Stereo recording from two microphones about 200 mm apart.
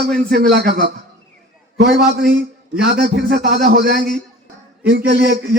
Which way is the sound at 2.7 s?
55° right (ahead or behind).